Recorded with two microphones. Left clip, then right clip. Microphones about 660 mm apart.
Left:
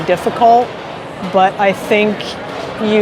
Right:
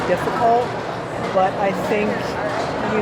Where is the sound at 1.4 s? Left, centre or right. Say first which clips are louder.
Left 7 dB; left.